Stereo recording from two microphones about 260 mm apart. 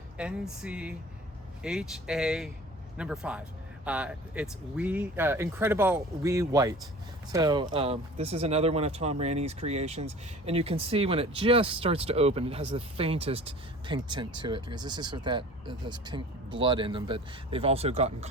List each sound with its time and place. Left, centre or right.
0.2 s speech: centre; by 18.3 s right